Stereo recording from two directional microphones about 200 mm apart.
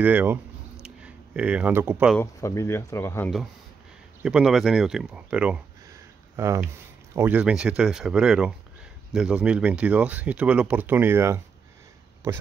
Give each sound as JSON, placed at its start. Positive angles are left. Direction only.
{"t": 0.0, "sound": "speech", "side_deg": -10}
{"t": 2.1, "sound": "speech", "side_deg": 15}
{"t": 4.2, "sound": "speech", "side_deg": -5}